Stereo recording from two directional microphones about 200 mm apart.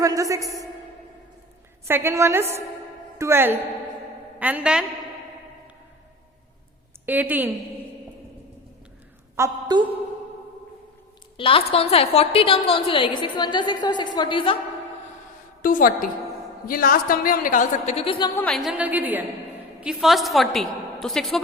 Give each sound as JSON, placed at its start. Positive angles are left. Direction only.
{"t": 0.0, "sound": "a woman's voice", "side_deg": -15}
{"t": 1.9, "sound": "a woman's voice", "side_deg": -10}
{"t": 7.0, "sound": "a woman's voice", "side_deg": -10}
{"t": 9.3, "sound": "a woman's voice", "side_deg": -15}
{"t": 11.3, "sound": "a woman's voice", "side_deg": 25}
{"t": 15.6, "sound": "a woman's voice", "side_deg": 45}
{"t": 18.3, "sound": "a woman's voice", "side_deg": 5}